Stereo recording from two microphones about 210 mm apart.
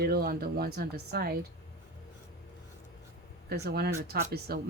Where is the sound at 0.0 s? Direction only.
45° right (ahead or behind).